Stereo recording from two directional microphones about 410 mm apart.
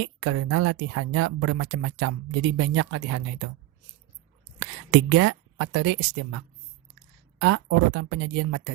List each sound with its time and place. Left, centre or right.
0.0 s speech: right
4.6 s speech: right